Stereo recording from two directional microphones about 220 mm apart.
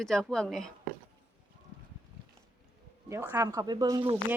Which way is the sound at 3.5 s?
20° right (ahead or behind).